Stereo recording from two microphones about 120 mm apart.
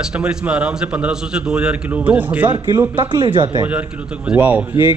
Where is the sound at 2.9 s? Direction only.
40° right (ahead or behind).